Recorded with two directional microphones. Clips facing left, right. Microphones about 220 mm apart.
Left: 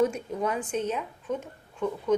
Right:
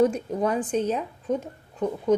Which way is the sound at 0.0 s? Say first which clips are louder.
Right 4 dB; 35° right (ahead or behind).